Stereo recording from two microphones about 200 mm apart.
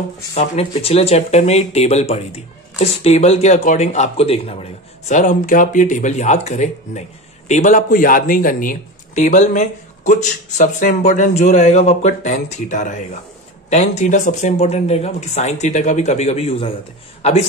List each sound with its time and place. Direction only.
0.3 s speech: 30° left (ahead or behind)